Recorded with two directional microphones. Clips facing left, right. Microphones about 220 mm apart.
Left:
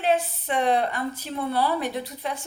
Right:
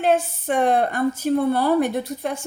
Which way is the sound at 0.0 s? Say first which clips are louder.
Right 4 dB; 50° right (ahead or behind).